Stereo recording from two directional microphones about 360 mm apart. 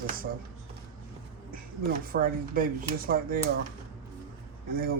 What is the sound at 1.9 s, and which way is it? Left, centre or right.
Speech, right.